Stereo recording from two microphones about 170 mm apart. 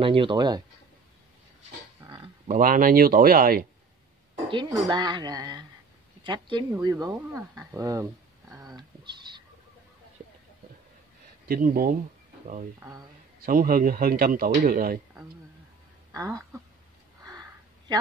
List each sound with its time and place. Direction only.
0.0 s a woman's voice: 30° right (ahead or behind)
2.0 s a sound: 30° right (ahead or behind)
2.4 s speech: 55° right (ahead or behind)
4.5 s a woman's voice: 25° right (ahead or behind)
8.5 s a sound: 25° right (ahead or behind)
11.4 s speech: 60° right (ahead or behind)
13.5 s speech: 55° right (ahead or behind)
16.1 s speech: 20° right (ahead or behind)
17.2 s a sound: 20° right (ahead or behind)